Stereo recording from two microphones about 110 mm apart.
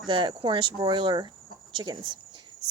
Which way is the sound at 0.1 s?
45° right (ahead or behind).